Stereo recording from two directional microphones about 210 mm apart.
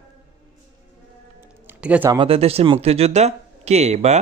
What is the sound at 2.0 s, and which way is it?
Speech, 25° right (ahead or behind).